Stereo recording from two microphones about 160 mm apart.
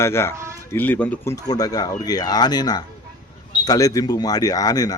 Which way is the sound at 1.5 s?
25° left (ahead or behind).